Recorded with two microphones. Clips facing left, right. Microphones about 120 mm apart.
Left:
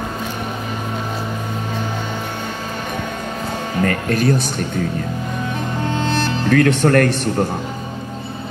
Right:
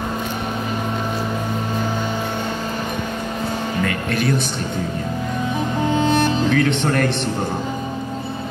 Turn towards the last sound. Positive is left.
turn(degrees=50)  # may be behind; listen again after turning